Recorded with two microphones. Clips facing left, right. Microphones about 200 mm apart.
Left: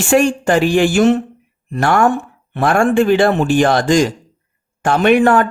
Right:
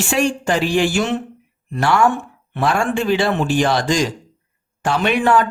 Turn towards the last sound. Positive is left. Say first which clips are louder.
# left 5 dB
turn(degrees=50)  # may be behind; listen again after turning